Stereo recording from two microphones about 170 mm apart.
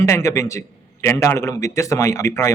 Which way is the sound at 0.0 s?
15° left (ahead or behind).